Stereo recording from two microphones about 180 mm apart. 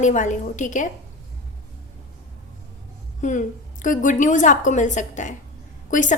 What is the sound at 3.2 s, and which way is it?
A woman's voice, 45° left (ahead or behind).